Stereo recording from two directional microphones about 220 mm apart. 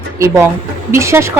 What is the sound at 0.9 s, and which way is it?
Speech, 10° right (ahead or behind).